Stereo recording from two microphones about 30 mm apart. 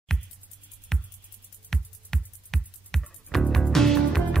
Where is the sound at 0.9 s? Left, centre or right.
Centre.